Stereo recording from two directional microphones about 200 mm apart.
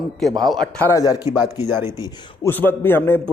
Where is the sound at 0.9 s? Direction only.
15° left (ahead or behind).